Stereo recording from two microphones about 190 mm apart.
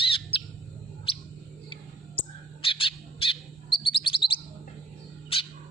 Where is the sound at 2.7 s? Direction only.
30° left (ahead or behind).